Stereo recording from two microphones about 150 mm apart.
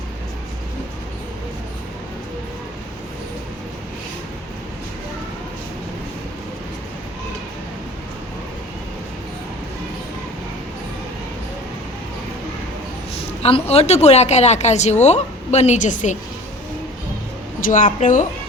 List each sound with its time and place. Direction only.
13.4 s a woman's voice: 45° left (ahead or behind)
17.6 s a woman's voice: 65° left (ahead or behind)